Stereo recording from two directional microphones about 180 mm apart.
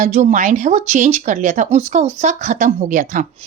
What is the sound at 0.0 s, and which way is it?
A woman's voice, 40° right (ahead or behind).